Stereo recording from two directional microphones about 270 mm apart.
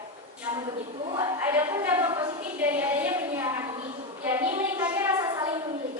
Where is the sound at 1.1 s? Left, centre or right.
Centre.